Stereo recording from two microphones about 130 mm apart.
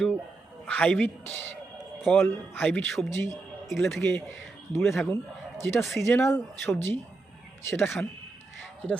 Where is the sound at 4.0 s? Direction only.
20° left (ahead or behind).